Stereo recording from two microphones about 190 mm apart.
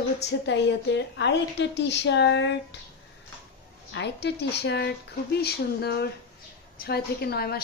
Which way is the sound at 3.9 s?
65° left (ahead or behind).